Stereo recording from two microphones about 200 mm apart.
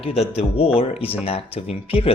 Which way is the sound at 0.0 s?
30° left (ahead or behind).